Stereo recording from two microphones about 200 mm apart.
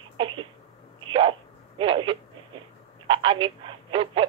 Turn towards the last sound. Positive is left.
turn(degrees=-25)  # may be behind; listen again after turning